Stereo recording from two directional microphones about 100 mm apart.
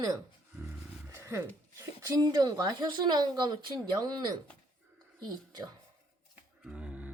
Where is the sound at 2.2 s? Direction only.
40° right (ahead or behind).